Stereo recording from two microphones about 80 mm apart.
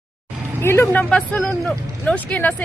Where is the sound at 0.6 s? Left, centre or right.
Left.